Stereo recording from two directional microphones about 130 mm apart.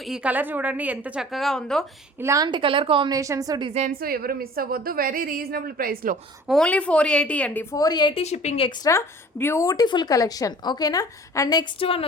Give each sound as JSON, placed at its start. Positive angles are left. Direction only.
{"t": 0.0, "sound": "a woman's voice", "side_deg": -5}
{"t": 2.2, "sound": "a woman's voice", "side_deg": -25}
{"t": 2.5, "sound": "a woman's voice", "side_deg": -40}
{"t": 3.1, "sound": "a woman's voice", "side_deg": -25}
{"t": 3.7, "sound": "a woman's voice", "side_deg": -60}
{"t": 4.6, "sound": "a woman's voice", "side_deg": -90}
{"t": 6.5, "sound": "a woman's voice", "side_deg": 10}
{"t": 8.1, "sound": "speech", "side_deg": 60}
{"t": 8.8, "sound": "speech", "side_deg": 20}
{"t": 11.8, "sound": "speech", "side_deg": 45}